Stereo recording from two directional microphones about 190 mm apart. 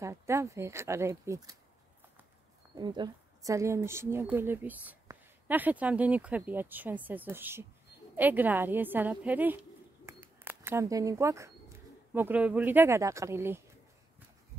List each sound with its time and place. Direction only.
0.0 s a woman's voice: 15° right (ahead or behind)
2.7 s a woman's voice: 25° right (ahead or behind)
10.0 s bird: 10° right (ahead or behind)
12.1 s a woman's voice: 10° right (ahead or behind)